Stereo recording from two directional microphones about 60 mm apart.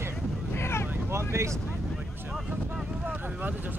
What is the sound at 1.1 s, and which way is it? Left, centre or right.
Speech, right.